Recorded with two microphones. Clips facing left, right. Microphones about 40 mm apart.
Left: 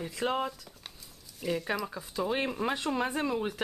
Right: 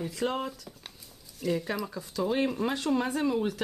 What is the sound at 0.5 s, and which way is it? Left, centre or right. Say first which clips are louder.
Speech: right 1 dB; centre.